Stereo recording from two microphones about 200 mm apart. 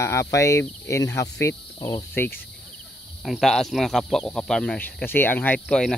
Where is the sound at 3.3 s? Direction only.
Centre (ahead or behind).